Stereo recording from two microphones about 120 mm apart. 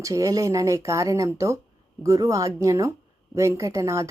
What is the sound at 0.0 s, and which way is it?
Speech, 30° right (ahead or behind).